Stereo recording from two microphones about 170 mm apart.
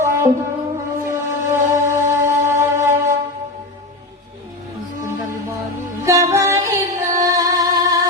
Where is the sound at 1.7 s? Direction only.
15° right (ahead or behind).